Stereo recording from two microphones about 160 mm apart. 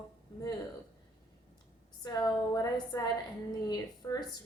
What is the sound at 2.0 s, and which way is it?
Speech, 25° left (ahead or behind).